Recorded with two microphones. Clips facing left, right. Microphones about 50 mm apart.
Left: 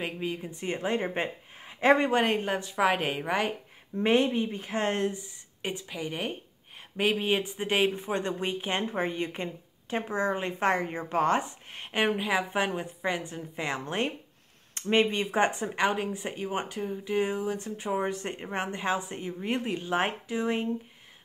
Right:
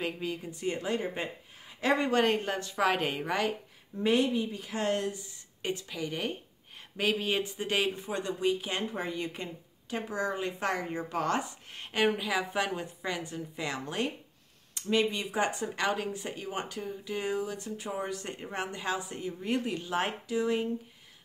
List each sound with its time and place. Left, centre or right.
0.0 s speech: left
2.0 s a woman's voice: centre
4.0 s speech: left
5.6 s speech: centre